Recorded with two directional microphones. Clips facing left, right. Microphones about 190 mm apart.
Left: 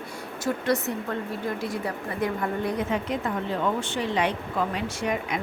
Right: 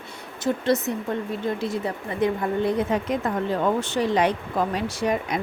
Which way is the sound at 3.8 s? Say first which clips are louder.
Right 4 dB; 40° right (ahead or behind).